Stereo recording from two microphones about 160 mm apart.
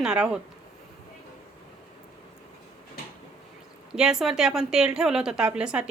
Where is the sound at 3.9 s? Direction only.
5° right (ahead or behind).